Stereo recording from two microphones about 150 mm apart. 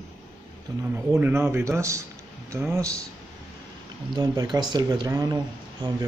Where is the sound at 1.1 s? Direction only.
15° right (ahead or behind).